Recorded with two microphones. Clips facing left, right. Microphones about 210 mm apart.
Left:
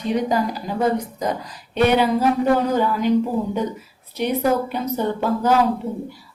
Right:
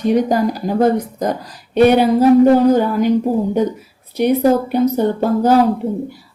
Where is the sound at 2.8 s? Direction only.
50° right (ahead or behind).